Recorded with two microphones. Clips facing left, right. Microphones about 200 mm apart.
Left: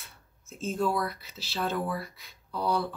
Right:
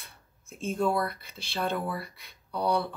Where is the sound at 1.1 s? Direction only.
55° right (ahead or behind).